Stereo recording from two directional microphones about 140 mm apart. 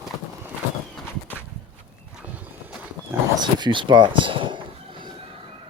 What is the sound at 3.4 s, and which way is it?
Speech, 35° right (ahead or behind).